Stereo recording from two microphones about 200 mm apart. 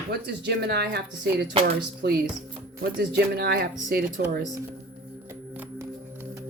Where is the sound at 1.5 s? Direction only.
30° right (ahead or behind).